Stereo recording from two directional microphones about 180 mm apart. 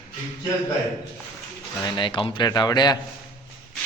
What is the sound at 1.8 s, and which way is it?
Speech, 25° left (ahead or behind).